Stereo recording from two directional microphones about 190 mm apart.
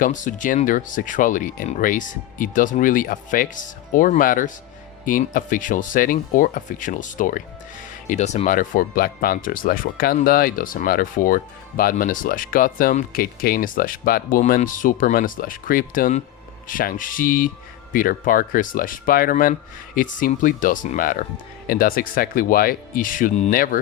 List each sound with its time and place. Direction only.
0.0 s speech: 45° left (ahead or behind)